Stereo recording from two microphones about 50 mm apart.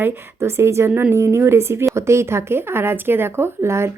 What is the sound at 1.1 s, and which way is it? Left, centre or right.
A woman's voice, right.